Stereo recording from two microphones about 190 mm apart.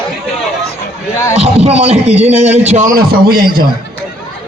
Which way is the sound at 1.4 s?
35° right (ahead or behind).